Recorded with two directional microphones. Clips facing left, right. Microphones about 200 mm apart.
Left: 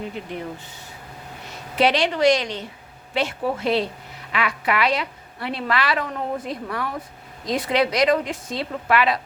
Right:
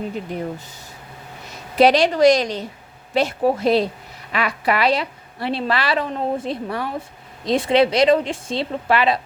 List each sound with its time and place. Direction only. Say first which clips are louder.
1.8 s a woman's voice: right 5 dB; 40° right (ahead or behind)